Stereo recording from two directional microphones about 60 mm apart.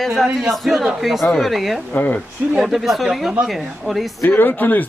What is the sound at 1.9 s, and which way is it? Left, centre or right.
Speech, left.